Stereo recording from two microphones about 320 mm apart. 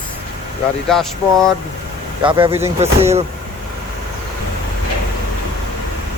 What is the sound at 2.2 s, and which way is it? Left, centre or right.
Speech, centre.